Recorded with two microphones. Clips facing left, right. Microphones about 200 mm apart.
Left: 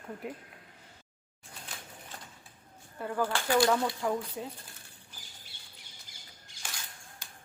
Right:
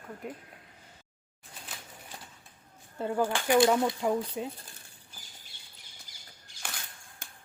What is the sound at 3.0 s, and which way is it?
Speech, 25° right (ahead or behind).